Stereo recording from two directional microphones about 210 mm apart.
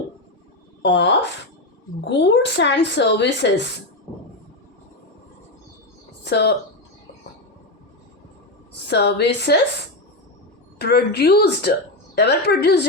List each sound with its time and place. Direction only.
0.8 s speech: 55° left (ahead or behind)
6.2 s speech: 50° left (ahead or behind)
8.9 s a woman's voice: 55° left (ahead or behind)
10.8 s a woman's voice: 50° left (ahead or behind)